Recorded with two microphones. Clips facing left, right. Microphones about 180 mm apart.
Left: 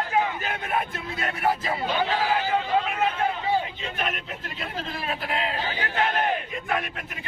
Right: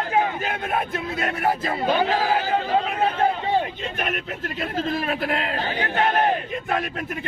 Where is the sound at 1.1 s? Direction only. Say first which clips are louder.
Right 1 dB; 50° right (ahead or behind).